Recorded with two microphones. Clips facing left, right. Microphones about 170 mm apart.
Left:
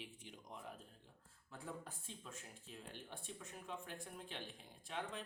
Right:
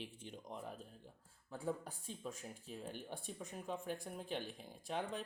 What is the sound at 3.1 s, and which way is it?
Speech, 40° right (ahead or behind).